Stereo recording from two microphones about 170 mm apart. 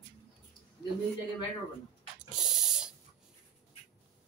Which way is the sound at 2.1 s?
5° right (ahead or behind).